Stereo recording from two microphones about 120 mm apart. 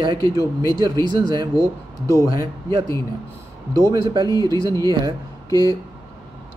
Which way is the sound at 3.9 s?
40° right (ahead or behind).